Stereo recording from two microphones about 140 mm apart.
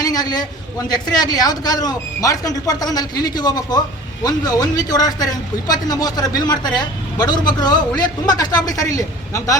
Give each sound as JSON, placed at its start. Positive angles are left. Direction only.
{"t": 0.0, "sound": "a man's voice", "side_deg": 30}